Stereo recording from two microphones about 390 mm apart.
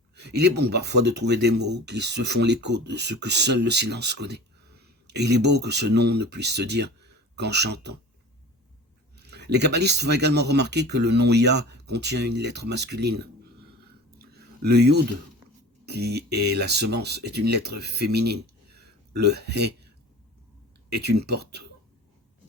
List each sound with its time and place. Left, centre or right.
0.2 s speech: right
9.1 s speech: right
14.2 s a sound: right
15.9 s speech: right
21.0 s speech: right